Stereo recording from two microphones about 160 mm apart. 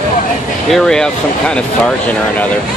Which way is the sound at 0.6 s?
Centre (ahead or behind).